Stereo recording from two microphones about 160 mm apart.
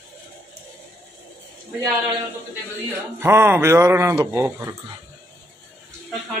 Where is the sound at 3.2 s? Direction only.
15° right (ahead or behind).